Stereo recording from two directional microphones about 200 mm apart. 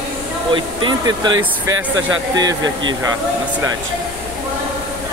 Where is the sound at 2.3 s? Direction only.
20° right (ahead or behind).